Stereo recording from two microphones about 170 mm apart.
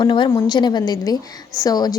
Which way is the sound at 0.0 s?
25° left (ahead or behind).